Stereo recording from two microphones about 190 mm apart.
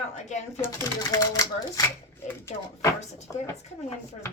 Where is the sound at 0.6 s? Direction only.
15° left (ahead or behind).